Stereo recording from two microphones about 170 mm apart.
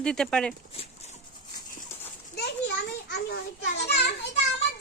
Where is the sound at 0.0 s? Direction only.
5° left (ahead or behind).